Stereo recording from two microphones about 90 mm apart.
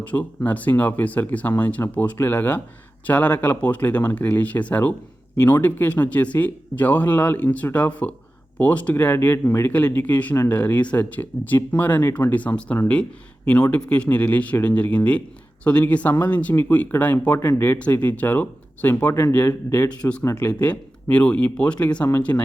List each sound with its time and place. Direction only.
0.0 s speech: 15° left (ahead or behind)
20.5 s speech: 15° left (ahead or behind)